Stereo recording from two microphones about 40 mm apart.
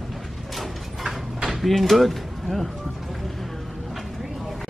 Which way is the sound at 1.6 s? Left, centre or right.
Centre.